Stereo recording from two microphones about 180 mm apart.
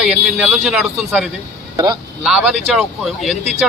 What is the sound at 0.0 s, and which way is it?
A man's voice, 5° right (ahead or behind).